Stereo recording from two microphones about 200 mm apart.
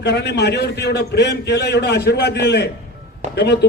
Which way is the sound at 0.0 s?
55° left (ahead or behind).